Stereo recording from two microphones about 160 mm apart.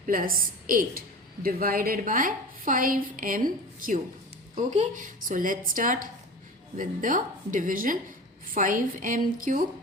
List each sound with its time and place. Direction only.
0.0 s a woman's voice: 65° right (ahead or behind)